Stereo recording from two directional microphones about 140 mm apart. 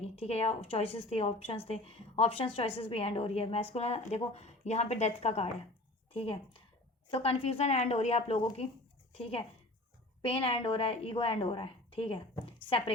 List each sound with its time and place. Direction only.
0.0 s a woman's voice: 45° left (ahead or behind)
7.1 s a woman's voice: 45° left (ahead or behind)
8.4 s a woman's voice: 40° left (ahead or behind)